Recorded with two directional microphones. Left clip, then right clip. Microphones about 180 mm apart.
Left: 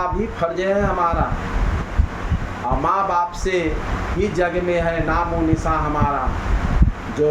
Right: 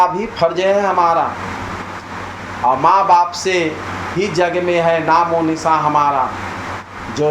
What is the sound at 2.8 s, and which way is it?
Speech, 15° left (ahead or behind).